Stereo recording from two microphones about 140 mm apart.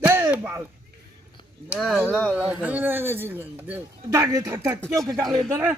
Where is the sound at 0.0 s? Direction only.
15° right (ahead or behind).